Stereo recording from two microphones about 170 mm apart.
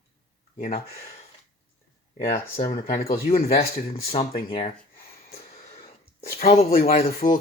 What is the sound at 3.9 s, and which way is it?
Speech, 35° left (ahead or behind).